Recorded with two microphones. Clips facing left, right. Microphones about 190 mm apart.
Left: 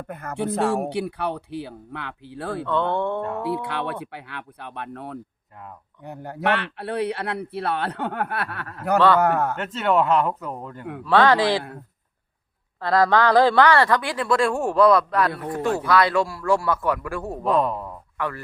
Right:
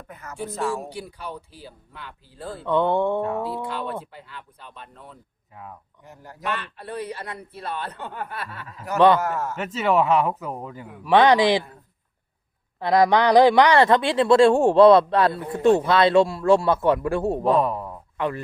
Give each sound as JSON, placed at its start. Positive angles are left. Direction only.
{"t": 0.1, "sound": "speech", "side_deg": 55}
{"t": 2.6, "sound": "a sound", "side_deg": -15}
{"t": 3.4, "sound": "speech", "side_deg": 65}
{"t": 9.6, "sound": "speech", "side_deg": -5}
{"t": 11.0, "sound": "a sound", "side_deg": -15}
{"t": 12.8, "sound": "speech", "side_deg": -15}
{"t": 17.6, "sound": "speech", "side_deg": -5}